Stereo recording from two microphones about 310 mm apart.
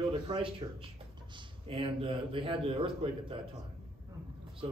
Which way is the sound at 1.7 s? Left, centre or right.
Centre.